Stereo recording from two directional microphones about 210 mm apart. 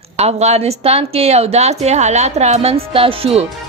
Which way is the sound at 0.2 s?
30° right (ahead or behind).